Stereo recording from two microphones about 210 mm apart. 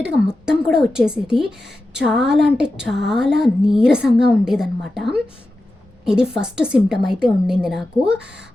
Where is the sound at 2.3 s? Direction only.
55° right (ahead or behind).